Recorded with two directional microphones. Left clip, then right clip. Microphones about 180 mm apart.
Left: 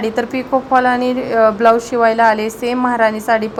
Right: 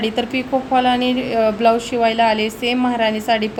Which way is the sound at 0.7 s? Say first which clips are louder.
Left 2 dB; centre (ahead or behind).